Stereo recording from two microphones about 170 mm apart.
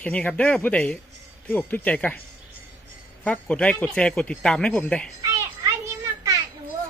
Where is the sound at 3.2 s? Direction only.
10° left (ahead or behind).